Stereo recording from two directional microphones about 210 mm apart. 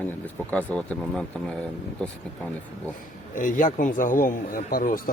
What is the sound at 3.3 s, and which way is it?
A man's voice, 40° left (ahead or behind).